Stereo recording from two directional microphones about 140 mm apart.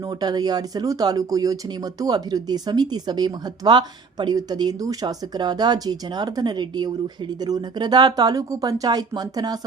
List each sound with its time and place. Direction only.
0.0 s speech: 25° right (ahead or behind)